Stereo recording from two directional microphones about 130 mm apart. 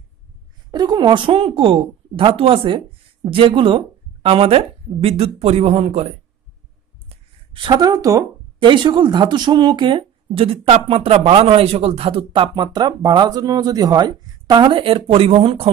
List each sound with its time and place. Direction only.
0.7 s a woman's voice: 30° right (ahead or behind); by 6.1 s 50° right (ahead or behind)
7.1 s a sound: 40° right (ahead or behind)
8.5 s speech: 40° right (ahead or behind)